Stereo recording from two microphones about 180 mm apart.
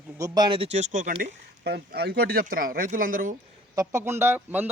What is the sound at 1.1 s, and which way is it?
Speech, 65° right (ahead or behind).